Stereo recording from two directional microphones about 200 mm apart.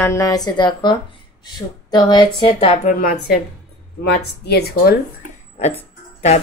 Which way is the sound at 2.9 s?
45° left (ahead or behind).